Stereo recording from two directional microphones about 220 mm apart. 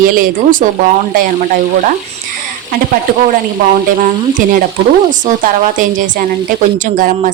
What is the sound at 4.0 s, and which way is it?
Speech, 35° right (ahead or behind).